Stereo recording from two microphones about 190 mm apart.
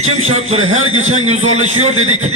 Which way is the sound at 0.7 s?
90° right.